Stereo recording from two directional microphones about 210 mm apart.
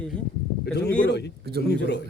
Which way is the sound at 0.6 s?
50° left (ahead or behind).